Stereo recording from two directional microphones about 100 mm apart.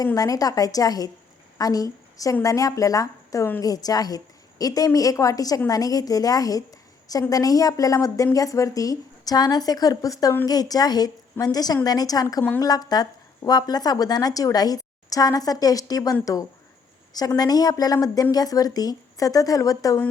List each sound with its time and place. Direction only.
0.0 s a woman's voice: 35° left (ahead or behind)